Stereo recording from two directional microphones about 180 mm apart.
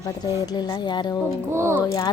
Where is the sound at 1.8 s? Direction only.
20° left (ahead or behind).